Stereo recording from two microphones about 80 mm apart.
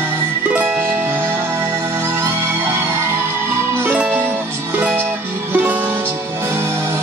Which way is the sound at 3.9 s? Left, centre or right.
Centre.